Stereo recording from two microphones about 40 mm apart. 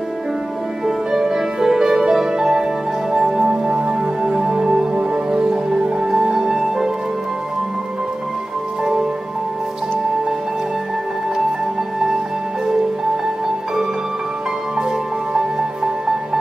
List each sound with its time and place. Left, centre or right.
0.8 s music: centre
3.6 s music: right
4.4 s music: centre
4.9 s music: right
15.3 s music: centre